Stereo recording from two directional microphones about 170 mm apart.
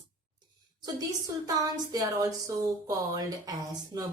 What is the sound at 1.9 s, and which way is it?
Speech, 20° right (ahead or behind).